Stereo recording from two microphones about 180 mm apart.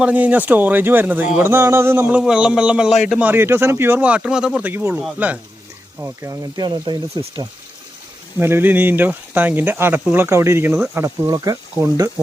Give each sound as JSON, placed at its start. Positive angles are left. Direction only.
{"t": 0.0, "sound": "speech", "side_deg": -10}
{"t": 6.0, "sound": "speech", "side_deg": -20}
{"t": 8.4, "sound": "speech", "side_deg": -15}